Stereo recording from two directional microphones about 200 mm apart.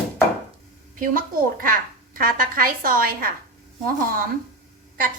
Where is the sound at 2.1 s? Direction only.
45° right (ahead or behind).